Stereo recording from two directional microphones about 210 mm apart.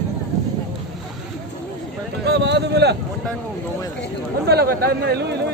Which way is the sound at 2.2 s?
55° right (ahead or behind).